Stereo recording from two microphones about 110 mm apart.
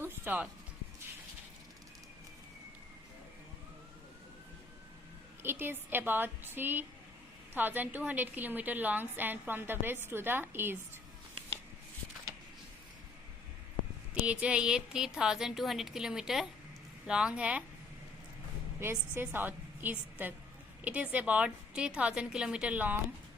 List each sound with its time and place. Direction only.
0.0 s music: 15° right (ahead or behind)
5.4 s a woman's voice: 20° right (ahead or behind)
14.1 s a woman's voice: 10° right (ahead or behind)
18.8 s a woman's voice: 20° right (ahead or behind)